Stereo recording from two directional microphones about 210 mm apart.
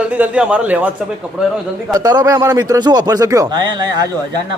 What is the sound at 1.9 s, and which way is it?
Speech, 20° right (ahead or behind).